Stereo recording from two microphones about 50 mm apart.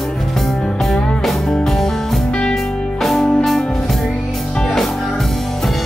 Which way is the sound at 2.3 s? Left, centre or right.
Centre.